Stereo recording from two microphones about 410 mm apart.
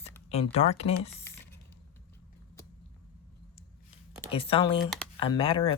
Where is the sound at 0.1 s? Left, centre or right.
Centre.